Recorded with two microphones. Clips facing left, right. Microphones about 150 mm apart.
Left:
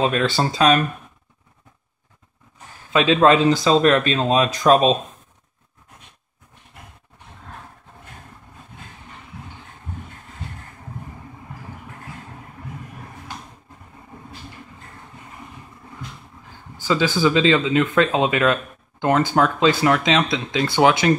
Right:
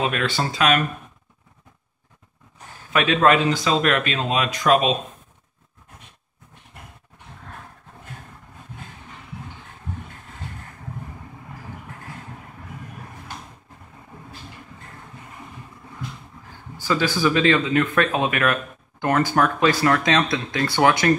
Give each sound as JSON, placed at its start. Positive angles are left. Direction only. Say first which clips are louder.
{"t": 0.0, "sound": "speech", "louder": "left 4 dB", "side_deg": 30}
{"t": 2.9, "sound": "speech", "louder": "left 3 dB", "side_deg": 25}
{"t": 16.8, "sound": "speech", "louder": "left 2 dB", "side_deg": 20}